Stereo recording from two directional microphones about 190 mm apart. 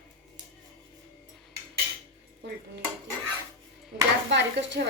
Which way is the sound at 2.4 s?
65° right (ahead or behind).